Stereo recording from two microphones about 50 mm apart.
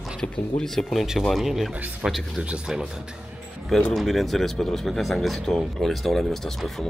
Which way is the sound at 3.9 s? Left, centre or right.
Centre.